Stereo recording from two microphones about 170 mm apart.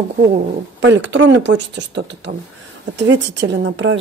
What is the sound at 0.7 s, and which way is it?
A woman's voice, 90° right.